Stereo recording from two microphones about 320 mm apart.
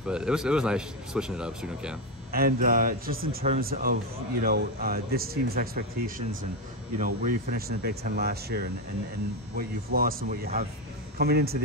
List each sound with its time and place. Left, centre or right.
0.0 s speech: centre
2.3 s a man's voice: right
7.0 s a man's voice: right